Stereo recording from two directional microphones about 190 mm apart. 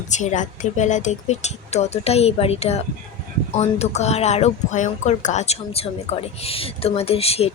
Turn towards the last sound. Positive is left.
turn(degrees=30)  # may be behind; listen again after turning